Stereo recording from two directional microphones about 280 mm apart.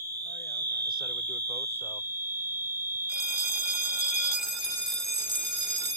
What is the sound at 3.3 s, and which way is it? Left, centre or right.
Alarm clock, centre.